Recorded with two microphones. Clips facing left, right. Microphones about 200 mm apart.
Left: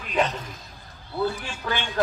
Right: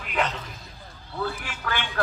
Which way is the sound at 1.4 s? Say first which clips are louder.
Left 2 dB; 20° left (ahead or behind).